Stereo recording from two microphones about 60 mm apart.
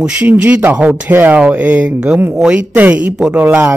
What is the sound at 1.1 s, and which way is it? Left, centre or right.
Speech, right.